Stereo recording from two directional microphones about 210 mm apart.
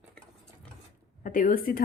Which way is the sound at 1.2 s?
40° left (ahead or behind).